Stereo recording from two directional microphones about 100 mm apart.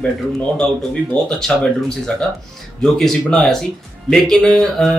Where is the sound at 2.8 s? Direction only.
5° left (ahead or behind).